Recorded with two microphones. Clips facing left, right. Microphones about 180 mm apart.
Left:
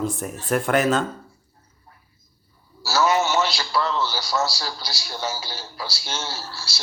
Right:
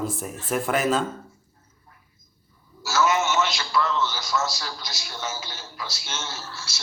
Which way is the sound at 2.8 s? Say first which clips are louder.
Left 2 dB; 35° left (ahead or behind).